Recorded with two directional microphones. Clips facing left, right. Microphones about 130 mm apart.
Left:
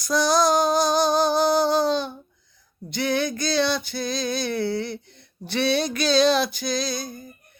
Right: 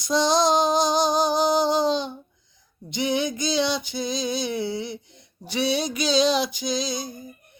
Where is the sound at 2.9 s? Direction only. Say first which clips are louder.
Even; 15° right (ahead or behind).